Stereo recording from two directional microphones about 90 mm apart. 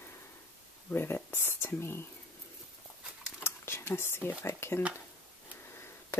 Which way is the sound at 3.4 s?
30° left (ahead or behind).